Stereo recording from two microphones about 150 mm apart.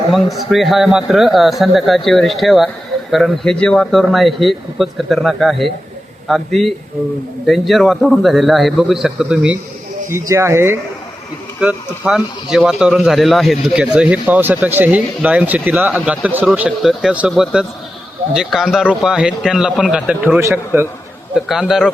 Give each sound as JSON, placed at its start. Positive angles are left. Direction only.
{"t": 0.1, "sound": "a man's voice", "side_deg": 0}
{"t": 10.1, "sound": "speech", "side_deg": -20}
{"t": 11.6, "sound": "a man's voice", "side_deg": -5}
{"t": 21.3, "sound": "a man's voice", "side_deg": -5}